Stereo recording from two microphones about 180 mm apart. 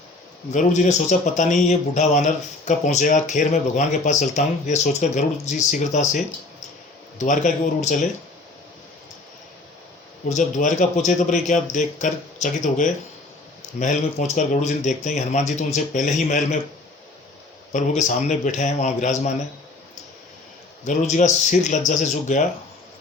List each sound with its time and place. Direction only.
0.5 s a man's voice: 40° left (ahead or behind)
10.2 s a man's voice: 45° left (ahead or behind)
17.7 s a man's voice: 40° left (ahead or behind)
20.8 s a man's voice: 45° left (ahead or behind)